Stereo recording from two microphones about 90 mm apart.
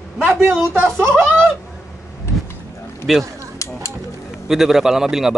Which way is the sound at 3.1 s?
5° right (ahead or behind).